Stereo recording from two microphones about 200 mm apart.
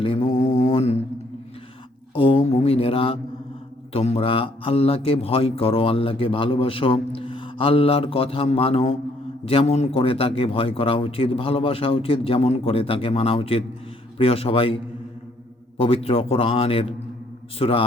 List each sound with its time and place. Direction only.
0.0 s a man's voice: 25° left (ahead or behind)
0.4 s mantra: 30° left (ahead or behind)
2.1 s mantra: 25° left (ahead or behind)
3.9 s a man's voice: 30° left (ahead or behind)
15.8 s a man's voice: 30° left (ahead or behind)